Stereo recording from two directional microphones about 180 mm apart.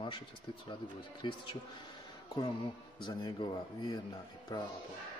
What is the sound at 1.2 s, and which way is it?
Speech, 25° left (ahead or behind).